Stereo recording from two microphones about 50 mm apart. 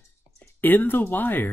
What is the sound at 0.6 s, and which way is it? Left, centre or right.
Speech, left.